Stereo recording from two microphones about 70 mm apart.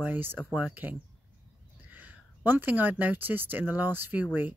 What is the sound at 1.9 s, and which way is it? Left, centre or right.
Speech, right.